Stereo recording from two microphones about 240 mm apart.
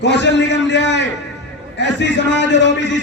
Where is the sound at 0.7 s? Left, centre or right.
Left.